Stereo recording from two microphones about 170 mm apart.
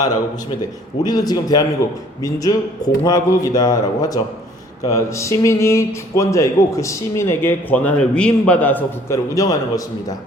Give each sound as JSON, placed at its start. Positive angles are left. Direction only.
{"t": 1.0, "sound": "a man's voice", "side_deg": 25}